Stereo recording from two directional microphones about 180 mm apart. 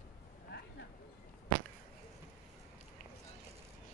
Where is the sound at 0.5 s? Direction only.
75° left (ahead or behind).